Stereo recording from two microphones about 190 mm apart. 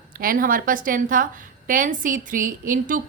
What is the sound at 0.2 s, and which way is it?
A woman's voice, 50° right (ahead or behind).